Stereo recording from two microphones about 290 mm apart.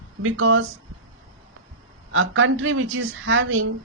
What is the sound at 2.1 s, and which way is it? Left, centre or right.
A woman's voice, right.